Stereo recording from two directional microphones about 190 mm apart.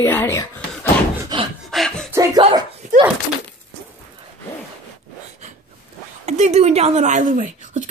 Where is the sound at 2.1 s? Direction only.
15° right (ahead or behind).